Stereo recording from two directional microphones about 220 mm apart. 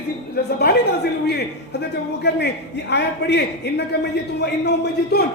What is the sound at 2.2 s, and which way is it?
A man's voice, 50° left (ahead or behind).